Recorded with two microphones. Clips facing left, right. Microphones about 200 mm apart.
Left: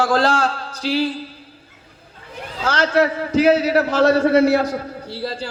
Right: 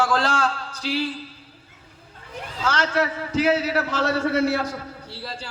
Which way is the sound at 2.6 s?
35° left (ahead or behind).